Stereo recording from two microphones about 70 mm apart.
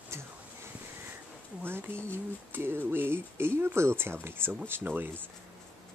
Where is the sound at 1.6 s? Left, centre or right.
Right.